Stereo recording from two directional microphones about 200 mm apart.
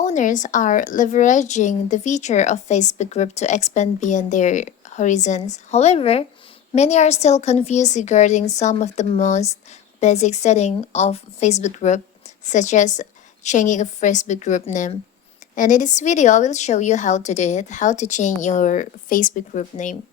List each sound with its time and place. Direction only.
0.0 s speech: 40° left (ahead or behind)